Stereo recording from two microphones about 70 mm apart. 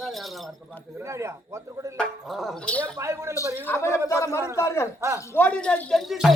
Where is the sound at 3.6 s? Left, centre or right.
Left.